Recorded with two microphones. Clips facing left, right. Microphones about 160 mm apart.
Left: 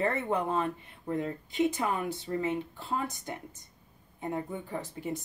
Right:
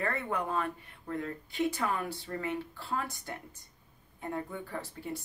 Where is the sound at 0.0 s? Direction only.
25° left (ahead or behind).